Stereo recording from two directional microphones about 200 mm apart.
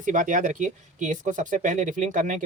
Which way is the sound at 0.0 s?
40° right (ahead or behind).